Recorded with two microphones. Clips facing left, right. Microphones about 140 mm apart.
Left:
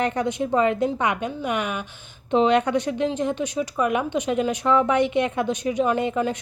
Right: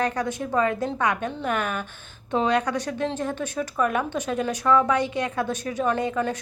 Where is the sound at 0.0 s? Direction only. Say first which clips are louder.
Left 2 dB; 25° left (ahead or behind).